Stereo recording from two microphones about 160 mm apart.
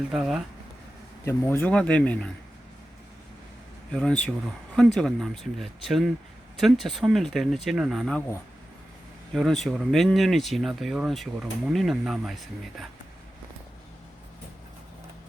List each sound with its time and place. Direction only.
0.1 s speech: 5° right (ahead or behind)
1.2 s speech: 15° left (ahead or behind)
3.9 s speech: 5° left (ahead or behind)
9.3 s speech: centre (ahead or behind)